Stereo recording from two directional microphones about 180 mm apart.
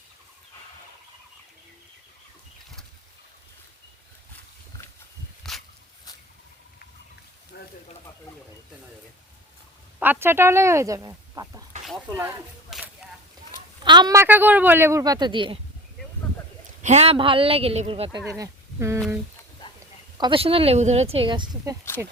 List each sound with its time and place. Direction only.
5.4 s a sound: centre (ahead or behind)
7.5 s a sound: 65° left (ahead or behind)
10.0 s speech: 10° right (ahead or behind)
12.7 s a sound: centre (ahead or behind)
13.8 s speech: 25° right (ahead or behind)
16.8 s speech: 35° right (ahead or behind)
18.3 s speech: 20° right (ahead or behind)
18.9 s speech: centre (ahead or behind)
20.1 s speech: 25° right (ahead or behind)